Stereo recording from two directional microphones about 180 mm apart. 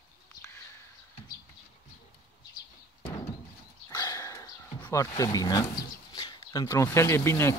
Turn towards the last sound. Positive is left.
turn(degrees=15)  # may be behind; listen again after turning